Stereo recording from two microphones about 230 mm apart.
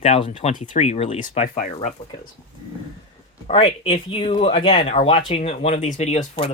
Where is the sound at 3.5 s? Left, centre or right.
Left.